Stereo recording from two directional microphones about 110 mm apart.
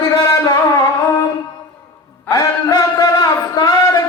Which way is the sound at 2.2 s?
30° left (ahead or behind).